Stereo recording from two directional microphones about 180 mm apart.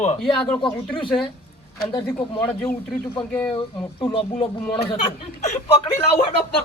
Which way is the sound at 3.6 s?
25° left (ahead or behind).